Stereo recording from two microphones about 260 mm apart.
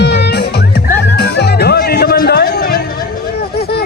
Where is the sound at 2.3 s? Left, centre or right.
Left.